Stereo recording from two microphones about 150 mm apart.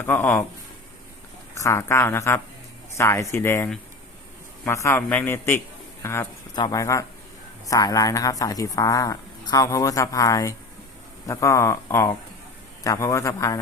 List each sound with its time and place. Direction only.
0.0 s a man's voice: 15° left (ahead or behind)
1.6 s a man's voice: 20° left (ahead or behind)